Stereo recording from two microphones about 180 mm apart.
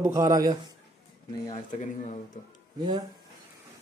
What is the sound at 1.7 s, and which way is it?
Speech, 40° left (ahead or behind).